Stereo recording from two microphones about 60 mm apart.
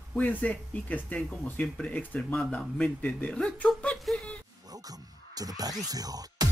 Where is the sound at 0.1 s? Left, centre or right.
Left.